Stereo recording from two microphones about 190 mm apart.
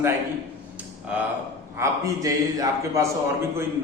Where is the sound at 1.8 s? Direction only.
20° right (ahead or behind).